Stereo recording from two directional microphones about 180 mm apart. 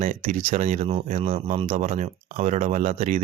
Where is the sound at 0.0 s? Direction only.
40° right (ahead or behind).